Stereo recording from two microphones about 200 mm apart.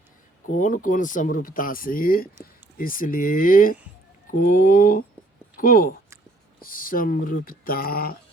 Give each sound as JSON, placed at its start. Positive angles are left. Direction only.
{"t": 0.4, "sound": "speech", "side_deg": 40}